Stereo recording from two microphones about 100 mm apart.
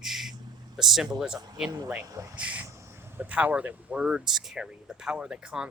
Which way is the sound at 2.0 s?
35° right (ahead or behind).